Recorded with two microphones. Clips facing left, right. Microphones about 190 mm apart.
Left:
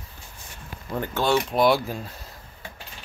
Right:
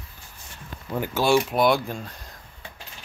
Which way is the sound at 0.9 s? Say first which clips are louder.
Right 2 dB; 10° right (ahead or behind).